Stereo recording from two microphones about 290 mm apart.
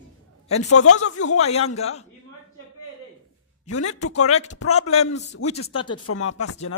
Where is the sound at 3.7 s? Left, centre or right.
Left.